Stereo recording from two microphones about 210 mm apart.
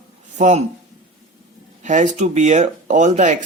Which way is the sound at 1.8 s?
35° right (ahead or behind).